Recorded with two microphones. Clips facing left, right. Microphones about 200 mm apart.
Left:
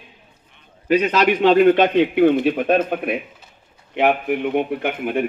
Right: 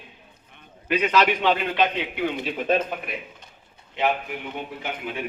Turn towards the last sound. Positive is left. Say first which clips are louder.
# left 10 dB
turn(degrees=55)  # may be behind; listen again after turning